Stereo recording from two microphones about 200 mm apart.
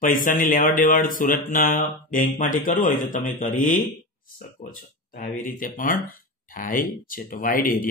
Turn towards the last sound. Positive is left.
turn(degrees=45)  # may be behind; listen again after turning